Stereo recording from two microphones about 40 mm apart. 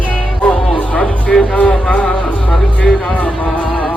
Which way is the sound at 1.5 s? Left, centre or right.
Left.